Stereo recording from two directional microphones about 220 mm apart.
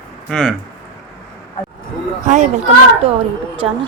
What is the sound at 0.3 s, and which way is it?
Speech, 5° left (ahead or behind).